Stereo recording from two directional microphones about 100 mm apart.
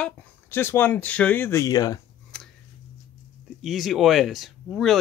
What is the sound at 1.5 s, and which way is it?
Speech, 35° left (ahead or behind).